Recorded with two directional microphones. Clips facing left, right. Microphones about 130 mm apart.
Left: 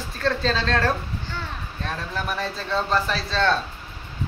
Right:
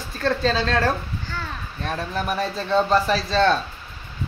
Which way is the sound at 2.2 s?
5° right (ahead or behind).